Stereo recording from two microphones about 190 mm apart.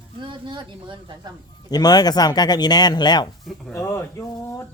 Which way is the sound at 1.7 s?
20° left (ahead or behind).